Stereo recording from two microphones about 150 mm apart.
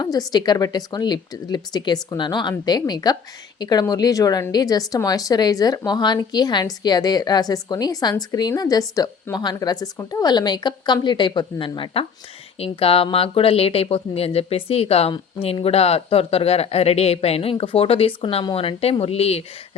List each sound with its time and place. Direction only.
0.0 s speech: 25° left (ahead or behind); by 19.5 s 40° left (ahead or behind)